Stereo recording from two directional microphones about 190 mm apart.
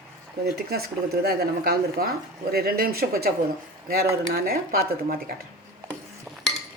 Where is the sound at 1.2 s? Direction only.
55° right (ahead or behind).